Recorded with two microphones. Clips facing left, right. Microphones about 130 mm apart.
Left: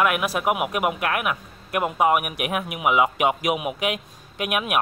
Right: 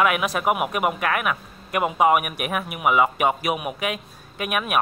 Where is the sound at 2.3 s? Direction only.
15° left (ahead or behind).